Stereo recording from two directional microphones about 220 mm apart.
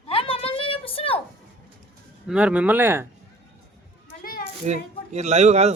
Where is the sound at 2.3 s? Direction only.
5° right (ahead or behind).